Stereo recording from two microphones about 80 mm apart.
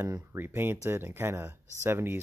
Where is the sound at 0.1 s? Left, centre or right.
Right.